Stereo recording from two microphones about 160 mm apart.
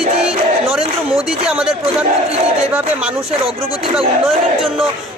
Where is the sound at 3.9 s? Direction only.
Centre (ahead or behind).